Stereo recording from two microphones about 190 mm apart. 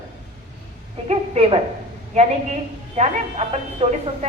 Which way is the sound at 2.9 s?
35° right (ahead or behind).